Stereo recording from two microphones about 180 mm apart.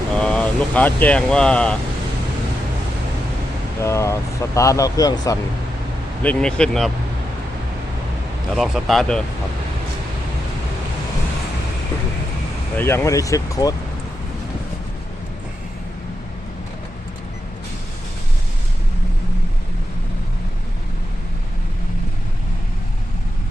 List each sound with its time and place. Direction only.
0.2 s speech: 5° left (ahead or behind)
3.8 s speech: 15° left (ahead or behind)
6.2 s speech: 5° left (ahead or behind)
8.5 s speech: centre (ahead or behind)
12.7 s speech: 15° left (ahead or behind)